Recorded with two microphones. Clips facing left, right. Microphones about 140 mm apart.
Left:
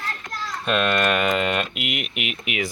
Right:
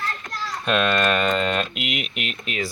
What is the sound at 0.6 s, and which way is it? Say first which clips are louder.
Speech: even; centre (ahead or behind).